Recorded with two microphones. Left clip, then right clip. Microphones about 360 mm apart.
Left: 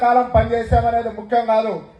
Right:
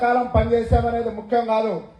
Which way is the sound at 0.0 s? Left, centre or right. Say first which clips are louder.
Left 4 dB; left.